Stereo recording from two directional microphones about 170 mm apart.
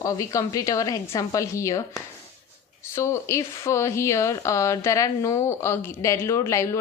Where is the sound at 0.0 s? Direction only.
20° left (ahead or behind).